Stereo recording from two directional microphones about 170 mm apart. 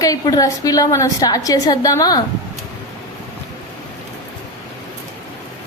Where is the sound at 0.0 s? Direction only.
20° left (ahead or behind).